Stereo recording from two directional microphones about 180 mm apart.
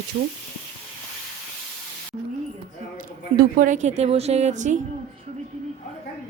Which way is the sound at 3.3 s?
50° right (ahead or behind).